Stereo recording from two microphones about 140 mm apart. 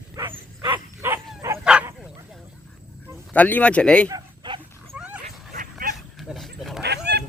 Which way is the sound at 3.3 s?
10° left (ahead or behind).